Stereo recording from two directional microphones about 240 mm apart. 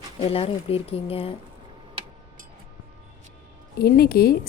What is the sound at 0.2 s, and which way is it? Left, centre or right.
Speech, left.